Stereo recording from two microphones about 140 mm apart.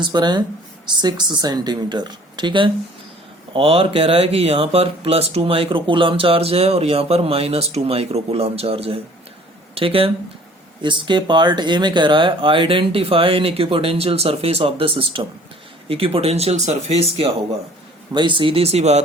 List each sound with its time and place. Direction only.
0.0 s speech: 30° right (ahead or behind); by 17.2 s 50° right (ahead or behind)
18.1 s speech: 35° right (ahead or behind); by 19.0 s 50° right (ahead or behind)